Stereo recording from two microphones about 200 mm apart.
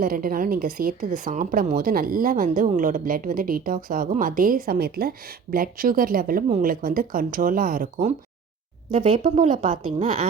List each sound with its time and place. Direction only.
0.0 s a woman's voice: 45° right (ahead or behind)